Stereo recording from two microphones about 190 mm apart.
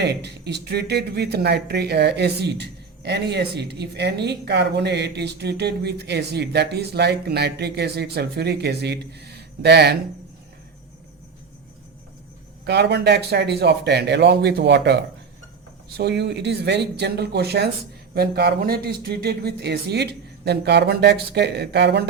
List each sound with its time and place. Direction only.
0.0 s speech: 60° right (ahead or behind)
12.6 s speech: 60° right (ahead or behind)